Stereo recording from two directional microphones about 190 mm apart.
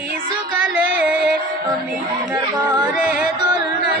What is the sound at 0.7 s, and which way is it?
Music, 5° right (ahead or behind).